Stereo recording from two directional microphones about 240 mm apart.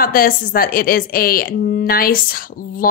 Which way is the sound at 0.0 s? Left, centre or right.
Left.